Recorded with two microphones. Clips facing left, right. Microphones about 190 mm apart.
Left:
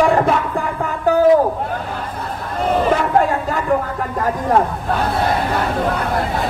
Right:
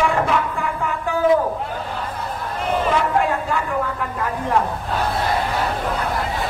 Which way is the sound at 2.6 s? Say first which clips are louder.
Left 4 dB; 40° left (ahead or behind).